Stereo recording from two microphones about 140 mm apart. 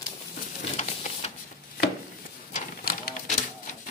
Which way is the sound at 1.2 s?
50° left (ahead or behind).